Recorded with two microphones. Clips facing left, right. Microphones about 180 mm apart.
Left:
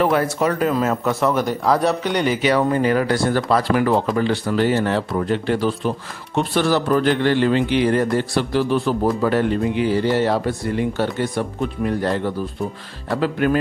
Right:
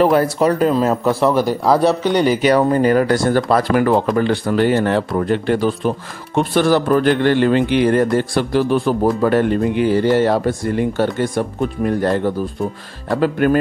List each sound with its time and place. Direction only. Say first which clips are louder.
0.0 s speech: right 4 dB; 35° right (ahead or behind)
1.8 s a man's voice: right 4 dB; centre (ahead or behind)
2.1 s speech: right 4 dB; 40° right (ahead or behind)
13.2 s speech: right 4 dB; 50° right (ahead or behind)